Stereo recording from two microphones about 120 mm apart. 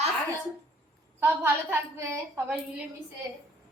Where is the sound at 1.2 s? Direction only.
20° right (ahead or behind).